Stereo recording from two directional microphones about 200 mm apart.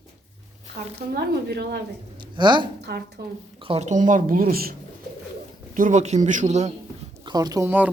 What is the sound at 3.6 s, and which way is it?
Speech, 30° right (ahead or behind).